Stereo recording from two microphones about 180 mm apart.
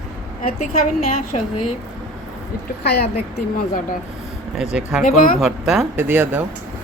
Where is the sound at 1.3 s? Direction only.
35° left (ahead or behind).